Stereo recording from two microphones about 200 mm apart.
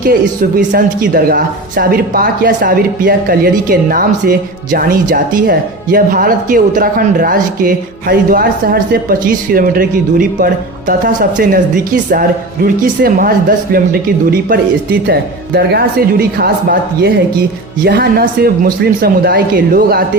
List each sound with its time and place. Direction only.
0.0 s speech: 45° right (ahead or behind)
12.6 s speech: 45° right (ahead or behind)